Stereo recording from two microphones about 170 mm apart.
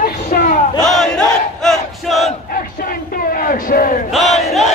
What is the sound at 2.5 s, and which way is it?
Crowd, 55° left (ahead or behind).